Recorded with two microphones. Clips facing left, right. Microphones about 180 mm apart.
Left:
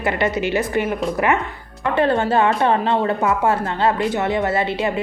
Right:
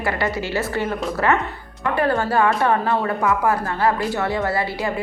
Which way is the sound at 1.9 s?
25° left (ahead or behind).